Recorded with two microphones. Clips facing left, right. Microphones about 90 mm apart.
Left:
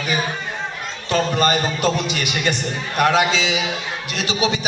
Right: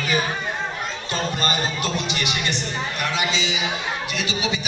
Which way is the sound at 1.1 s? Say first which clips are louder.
Left 7 dB; 60° left (ahead or behind).